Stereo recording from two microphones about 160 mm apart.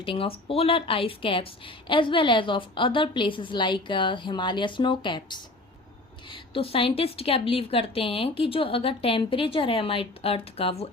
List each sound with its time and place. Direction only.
0.0 s speech: 35° left (ahead or behind)